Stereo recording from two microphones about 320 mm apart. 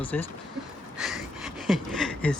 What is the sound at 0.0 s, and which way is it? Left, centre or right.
Speech, centre.